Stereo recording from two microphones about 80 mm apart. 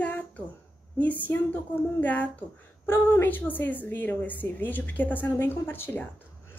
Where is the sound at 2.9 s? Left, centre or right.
Left.